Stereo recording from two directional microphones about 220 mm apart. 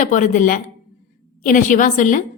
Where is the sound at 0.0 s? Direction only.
35° left (ahead or behind).